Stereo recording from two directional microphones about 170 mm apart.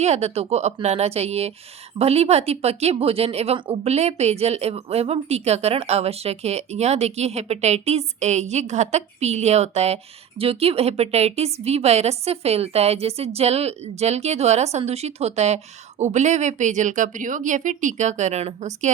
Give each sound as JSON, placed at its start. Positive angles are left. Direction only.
{"t": 0.0, "sound": "speech", "side_deg": -40}